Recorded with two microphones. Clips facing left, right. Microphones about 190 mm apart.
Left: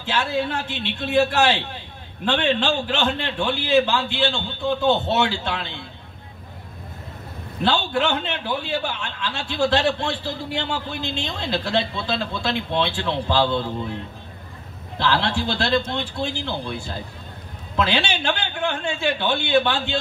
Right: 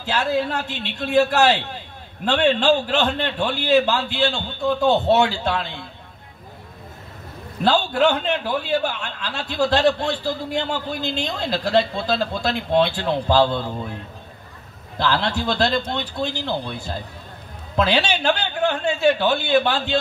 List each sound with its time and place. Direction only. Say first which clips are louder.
0.0 s a man's voice: right 2 dB; 40° right (ahead or behind)
7.6 s a man's voice: right 4 dB; 40° right (ahead or behind)
15.0 s a man's voice: even; 40° right (ahead or behind)